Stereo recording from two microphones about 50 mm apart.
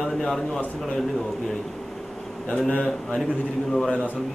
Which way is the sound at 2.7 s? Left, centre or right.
Left.